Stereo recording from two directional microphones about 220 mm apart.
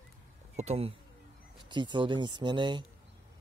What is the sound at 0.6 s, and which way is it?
Speech, 30° right (ahead or behind).